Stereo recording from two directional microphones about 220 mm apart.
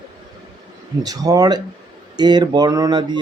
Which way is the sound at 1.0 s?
15° right (ahead or behind).